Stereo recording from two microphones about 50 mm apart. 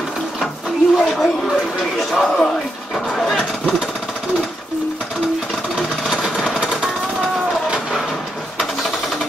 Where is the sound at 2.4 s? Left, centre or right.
Centre.